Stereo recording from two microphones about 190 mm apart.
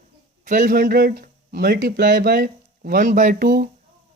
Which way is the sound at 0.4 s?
40° right (ahead or behind).